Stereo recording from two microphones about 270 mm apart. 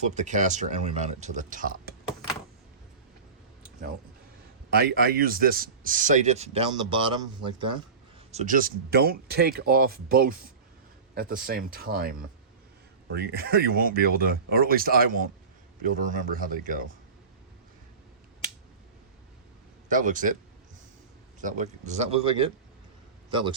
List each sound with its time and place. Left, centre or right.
0.0 s speech: right
4.7 s speech: right
19.9 s speech: right
21.4 s a man's voice: right